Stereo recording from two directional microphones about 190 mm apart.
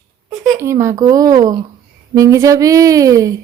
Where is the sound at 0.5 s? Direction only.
15° right (ahead or behind).